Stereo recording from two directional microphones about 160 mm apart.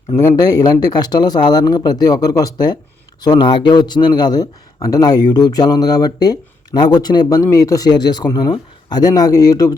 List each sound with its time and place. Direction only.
0.2 s speech: 25° left (ahead or behind)